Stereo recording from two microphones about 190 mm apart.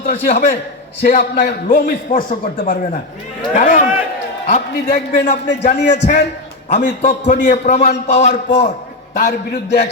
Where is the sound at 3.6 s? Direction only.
40° left (ahead or behind).